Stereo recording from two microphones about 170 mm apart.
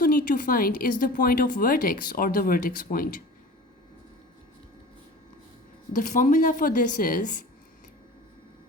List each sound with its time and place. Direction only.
0.0 s speech: 55° left (ahead or behind)
5.9 s a woman's voice: 50° left (ahead or behind)